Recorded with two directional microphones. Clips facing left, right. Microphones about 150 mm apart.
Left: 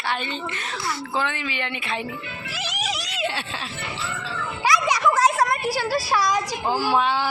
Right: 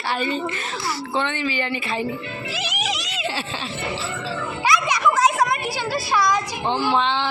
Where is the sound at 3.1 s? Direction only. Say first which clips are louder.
Even; centre (ahead or behind).